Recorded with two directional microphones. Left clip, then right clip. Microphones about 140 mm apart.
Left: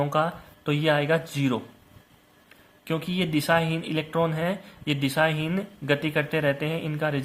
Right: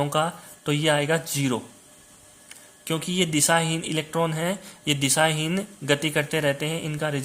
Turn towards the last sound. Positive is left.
turn(degrees=-15)  # may be behind; listen again after turning